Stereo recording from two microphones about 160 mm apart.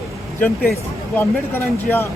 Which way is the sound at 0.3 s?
10° left (ahead or behind).